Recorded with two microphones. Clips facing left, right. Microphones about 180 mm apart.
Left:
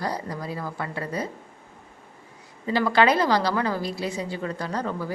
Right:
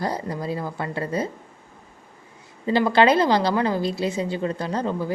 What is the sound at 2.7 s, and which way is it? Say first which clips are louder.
A woman's voice: right 3 dB; 25° right (ahead or behind).